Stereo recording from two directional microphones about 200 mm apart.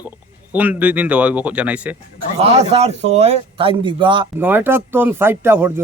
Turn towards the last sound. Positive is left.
turn(degrees=-10)  # may be behind; listen again after turning